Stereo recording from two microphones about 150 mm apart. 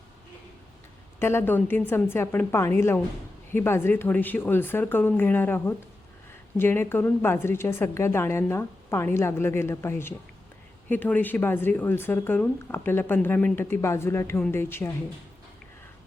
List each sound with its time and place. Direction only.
1.2 s speech: 15° left (ahead or behind)